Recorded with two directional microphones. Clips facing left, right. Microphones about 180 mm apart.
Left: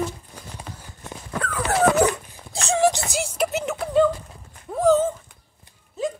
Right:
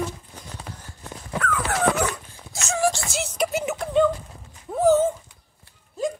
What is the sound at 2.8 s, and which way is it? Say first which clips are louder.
Music: left 3 dB; 20° left (ahead or behind).